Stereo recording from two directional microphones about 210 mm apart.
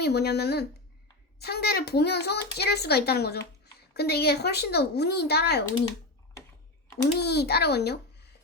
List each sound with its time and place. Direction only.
0.0 s a child's voice: 50° left (ahead or behind)
7.0 s a child's voice: 50° left (ahead or behind)